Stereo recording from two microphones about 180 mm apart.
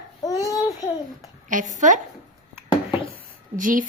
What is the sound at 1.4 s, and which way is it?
Speech, 45° right (ahead or behind).